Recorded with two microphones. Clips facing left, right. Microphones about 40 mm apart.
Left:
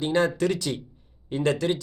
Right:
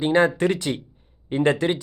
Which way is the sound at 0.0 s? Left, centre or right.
Right.